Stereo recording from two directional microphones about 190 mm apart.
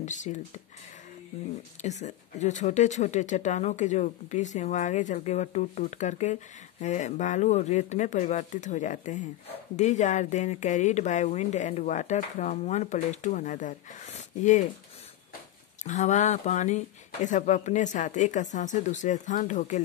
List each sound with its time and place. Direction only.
0.0 s speech: 40° left (ahead or behind)
1.8 s speech: 40° left (ahead or behind)
15.8 s speech: 40° left (ahead or behind)